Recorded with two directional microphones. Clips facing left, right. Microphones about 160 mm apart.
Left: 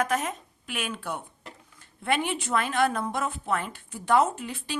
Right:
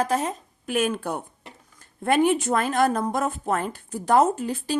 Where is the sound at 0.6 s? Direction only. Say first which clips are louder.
Right 10 dB; 45° right (ahead or behind).